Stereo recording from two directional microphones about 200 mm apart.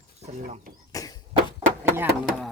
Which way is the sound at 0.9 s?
15° left (ahead or behind).